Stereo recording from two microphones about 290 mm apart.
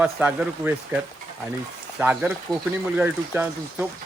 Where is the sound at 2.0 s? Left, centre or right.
Centre.